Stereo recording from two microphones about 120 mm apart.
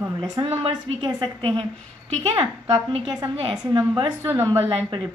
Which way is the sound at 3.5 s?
40° right (ahead or behind).